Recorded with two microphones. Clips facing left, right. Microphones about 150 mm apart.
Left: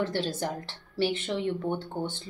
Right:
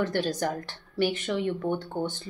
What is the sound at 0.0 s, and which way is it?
A woman's voice, 25° left (ahead or behind).